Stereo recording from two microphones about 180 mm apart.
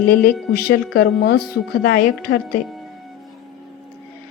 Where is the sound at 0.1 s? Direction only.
55° left (ahead or behind).